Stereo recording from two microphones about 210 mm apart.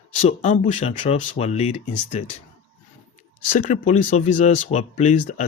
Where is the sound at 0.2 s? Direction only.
30° left (ahead or behind).